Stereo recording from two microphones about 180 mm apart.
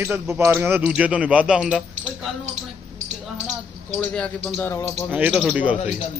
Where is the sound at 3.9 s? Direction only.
5° left (ahead or behind).